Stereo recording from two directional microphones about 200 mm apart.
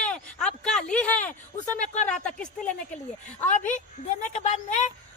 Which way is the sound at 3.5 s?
40° left (ahead or behind).